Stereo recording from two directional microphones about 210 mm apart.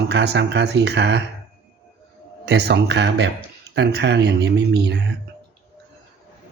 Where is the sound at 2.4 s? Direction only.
50° right (ahead or behind).